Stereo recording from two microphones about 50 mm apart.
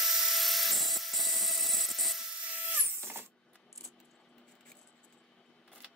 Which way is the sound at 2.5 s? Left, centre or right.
Right.